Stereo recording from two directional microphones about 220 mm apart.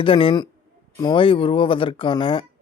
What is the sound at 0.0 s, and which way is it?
Speech, 25° left (ahead or behind).